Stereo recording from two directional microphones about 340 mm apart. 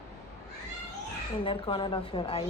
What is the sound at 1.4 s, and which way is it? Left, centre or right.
Speech, centre.